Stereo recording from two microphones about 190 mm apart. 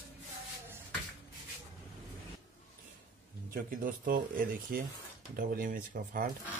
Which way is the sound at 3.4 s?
45° right (ahead or behind).